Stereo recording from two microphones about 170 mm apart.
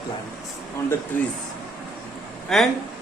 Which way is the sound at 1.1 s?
10° left (ahead or behind).